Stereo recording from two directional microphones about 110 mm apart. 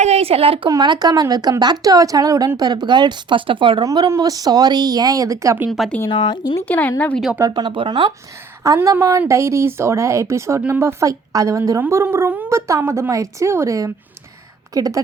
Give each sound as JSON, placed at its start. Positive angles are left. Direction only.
{"t": 0.0, "sound": "speech", "side_deg": -70}
{"t": 0.7, "sound": "speech", "side_deg": -40}
{"t": 3.8, "sound": "speech", "side_deg": -40}
{"t": 6.1, "sound": "speech", "side_deg": 50}
{"t": 6.6, "sound": "speech", "side_deg": 15}
{"t": 7.5, "sound": "speech", "side_deg": -45}
{"t": 8.6, "sound": "speech", "side_deg": -30}